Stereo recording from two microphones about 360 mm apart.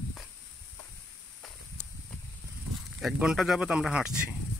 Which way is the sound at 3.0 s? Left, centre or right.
Centre.